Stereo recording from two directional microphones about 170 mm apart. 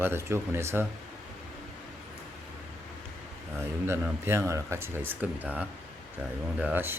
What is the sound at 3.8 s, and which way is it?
Speech, 15° right (ahead or behind).